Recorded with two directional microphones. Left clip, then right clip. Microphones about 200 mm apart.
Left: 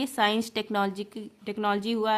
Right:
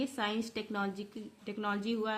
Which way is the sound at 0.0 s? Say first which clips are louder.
Left 10 dB; 35° left (ahead or behind).